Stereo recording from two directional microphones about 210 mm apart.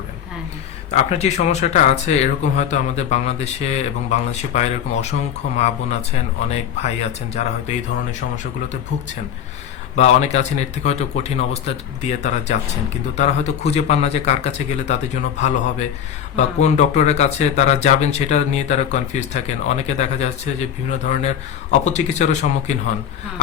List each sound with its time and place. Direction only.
0.9 s speech: 30° left (ahead or behind)
7.4 s speech: 35° left (ahead or behind)
9.9 s speech: 35° left (ahead or behind)